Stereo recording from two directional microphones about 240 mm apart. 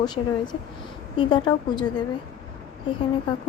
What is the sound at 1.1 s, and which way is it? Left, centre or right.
Speech, centre.